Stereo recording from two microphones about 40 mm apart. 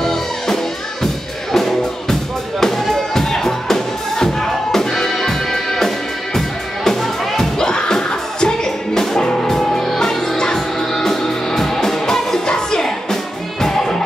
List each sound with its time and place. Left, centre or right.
0.0 s music: centre